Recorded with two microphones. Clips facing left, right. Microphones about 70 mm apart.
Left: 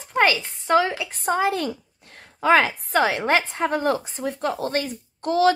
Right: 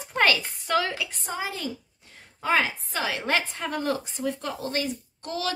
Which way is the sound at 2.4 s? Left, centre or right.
Left.